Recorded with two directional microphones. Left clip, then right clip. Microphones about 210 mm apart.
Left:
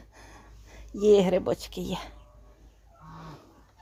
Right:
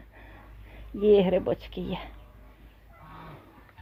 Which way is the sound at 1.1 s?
15° left (ahead or behind).